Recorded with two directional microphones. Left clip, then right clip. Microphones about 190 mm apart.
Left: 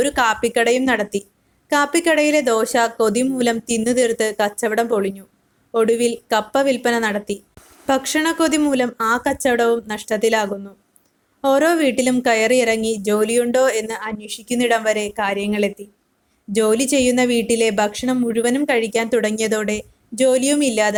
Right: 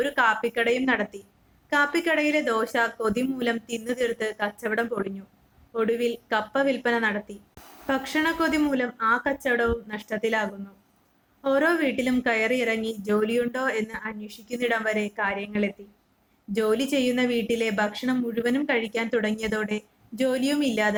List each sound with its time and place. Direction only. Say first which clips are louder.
0.0 s a woman's voice: left 5 dB; 40° left (ahead or behind)